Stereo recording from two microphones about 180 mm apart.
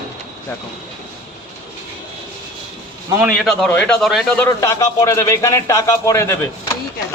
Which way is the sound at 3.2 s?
10° right (ahead or behind).